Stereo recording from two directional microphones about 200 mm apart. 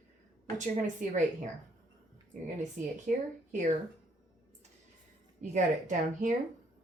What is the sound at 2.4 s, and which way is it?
Speech, 40° right (ahead or behind).